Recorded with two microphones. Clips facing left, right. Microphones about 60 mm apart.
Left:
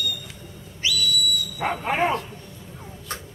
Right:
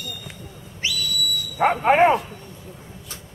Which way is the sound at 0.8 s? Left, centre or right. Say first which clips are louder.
Left 2 dB; right.